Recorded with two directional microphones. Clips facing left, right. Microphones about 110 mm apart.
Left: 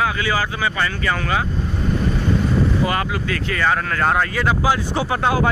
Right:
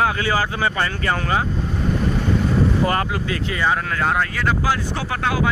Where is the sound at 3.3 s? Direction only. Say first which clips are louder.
Left 2 dB; 20° right (ahead or behind).